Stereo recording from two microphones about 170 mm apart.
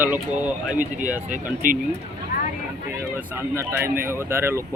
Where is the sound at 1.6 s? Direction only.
55° right (ahead or behind).